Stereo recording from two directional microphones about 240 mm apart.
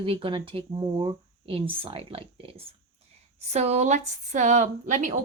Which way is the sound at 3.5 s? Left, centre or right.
Right.